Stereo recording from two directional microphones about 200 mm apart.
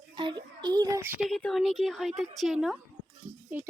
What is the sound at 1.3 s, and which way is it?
A woman's voice, centre (ahead or behind).